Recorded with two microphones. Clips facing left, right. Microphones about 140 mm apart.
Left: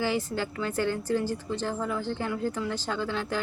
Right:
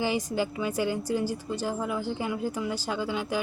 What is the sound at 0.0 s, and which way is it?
A woman's voice, 15° right (ahead or behind).